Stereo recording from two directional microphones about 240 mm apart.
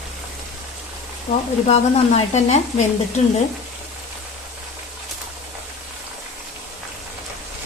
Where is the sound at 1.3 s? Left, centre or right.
Left.